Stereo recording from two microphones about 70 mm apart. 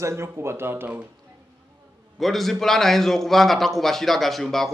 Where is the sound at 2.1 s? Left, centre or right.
Centre.